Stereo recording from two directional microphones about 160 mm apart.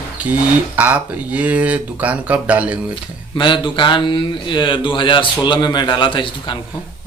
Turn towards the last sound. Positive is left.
turn(degrees=30)  # may be behind; listen again after turning